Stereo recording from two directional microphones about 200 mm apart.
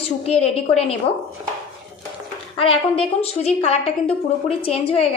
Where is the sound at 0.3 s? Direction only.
30° left (ahead or behind).